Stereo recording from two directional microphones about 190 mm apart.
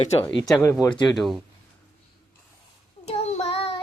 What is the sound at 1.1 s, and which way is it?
Speech, centre (ahead or behind).